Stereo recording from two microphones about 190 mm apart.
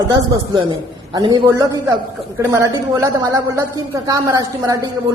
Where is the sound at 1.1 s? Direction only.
20° right (ahead or behind).